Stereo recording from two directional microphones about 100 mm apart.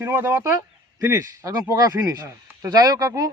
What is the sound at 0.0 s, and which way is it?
Speech, 25° right (ahead or behind).